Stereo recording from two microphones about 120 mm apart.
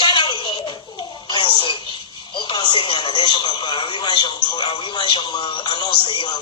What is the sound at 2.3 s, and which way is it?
Radio, 40° left (ahead or behind).